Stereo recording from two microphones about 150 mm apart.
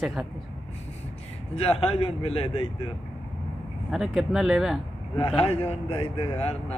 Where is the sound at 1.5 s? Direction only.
40° left (ahead or behind).